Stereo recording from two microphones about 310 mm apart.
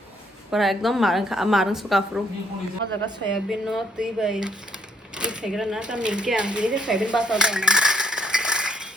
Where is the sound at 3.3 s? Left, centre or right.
Centre.